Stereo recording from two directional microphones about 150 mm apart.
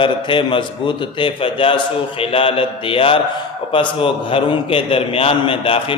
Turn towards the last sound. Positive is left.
turn(degrees=35)  # may be behind; listen again after turning